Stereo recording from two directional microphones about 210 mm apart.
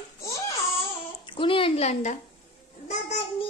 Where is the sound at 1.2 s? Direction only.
25° left (ahead or behind).